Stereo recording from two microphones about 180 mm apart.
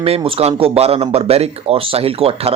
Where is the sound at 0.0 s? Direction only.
30° right (ahead or behind).